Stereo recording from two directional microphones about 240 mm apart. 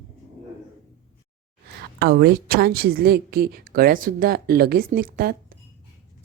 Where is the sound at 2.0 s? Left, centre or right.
Right.